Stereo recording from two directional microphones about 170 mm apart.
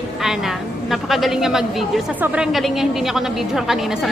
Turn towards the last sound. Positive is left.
turn(degrees=0)  # may be behind; listen again after turning